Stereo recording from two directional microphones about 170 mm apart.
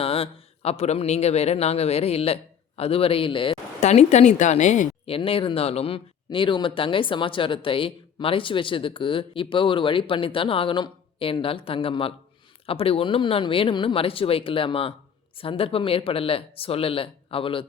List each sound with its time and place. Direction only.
0.0 s a man's voice: 35° left (ahead or behind)
3.8 s speech: 40° left (ahead or behind)